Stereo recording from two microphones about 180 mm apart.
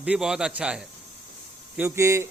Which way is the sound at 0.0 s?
5° right (ahead or behind).